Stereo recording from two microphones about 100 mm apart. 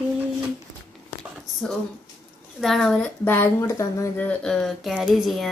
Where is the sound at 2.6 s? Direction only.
5° left (ahead or behind).